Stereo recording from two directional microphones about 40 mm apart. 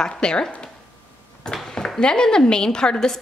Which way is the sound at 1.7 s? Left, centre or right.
Centre.